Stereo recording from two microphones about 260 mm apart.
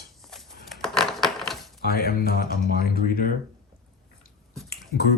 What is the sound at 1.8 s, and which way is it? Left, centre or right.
Speech, left.